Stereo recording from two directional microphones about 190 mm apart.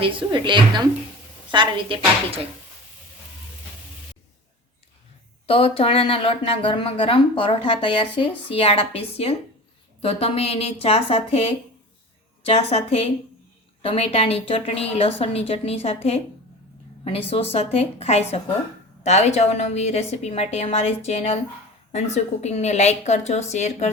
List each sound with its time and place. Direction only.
0.0 s speech: 25° right (ahead or behind)
5.5 s a woman's voice: 30° left (ahead or behind)
12.5 s a woman's voice: 35° left (ahead or behind)